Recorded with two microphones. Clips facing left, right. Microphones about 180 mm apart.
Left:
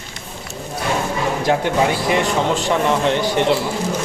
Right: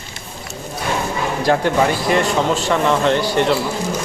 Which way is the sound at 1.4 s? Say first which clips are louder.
Right 2 dB; 20° left (ahead or behind).